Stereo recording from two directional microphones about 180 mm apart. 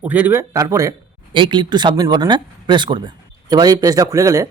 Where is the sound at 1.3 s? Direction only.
25° right (ahead or behind).